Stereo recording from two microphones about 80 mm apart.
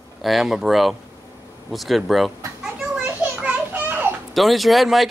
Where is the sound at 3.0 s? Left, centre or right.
Centre.